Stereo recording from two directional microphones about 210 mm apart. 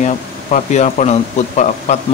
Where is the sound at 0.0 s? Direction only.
35° left (ahead or behind).